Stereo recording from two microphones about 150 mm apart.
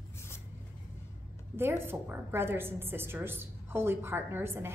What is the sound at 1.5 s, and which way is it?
A woman's voice, 15° right (ahead or behind).